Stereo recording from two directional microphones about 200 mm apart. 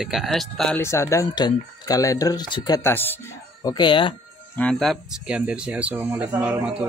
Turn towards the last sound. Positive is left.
turn(degrees=-5)  # may be behind; listen again after turning